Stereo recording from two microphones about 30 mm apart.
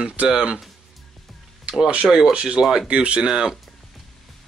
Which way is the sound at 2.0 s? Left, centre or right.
Right.